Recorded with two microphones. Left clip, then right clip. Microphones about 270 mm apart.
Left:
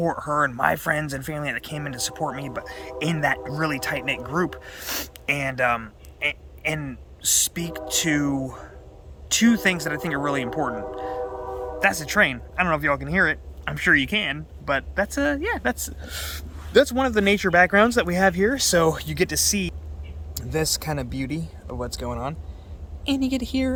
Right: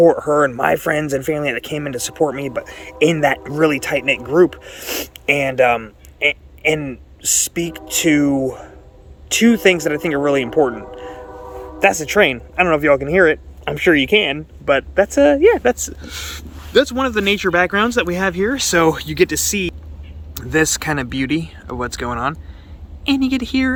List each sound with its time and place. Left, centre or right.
0.3 s a man's voice: centre
21.2 s speech: centre
21.7 s speech: centre
22.1 s a man's voice: centre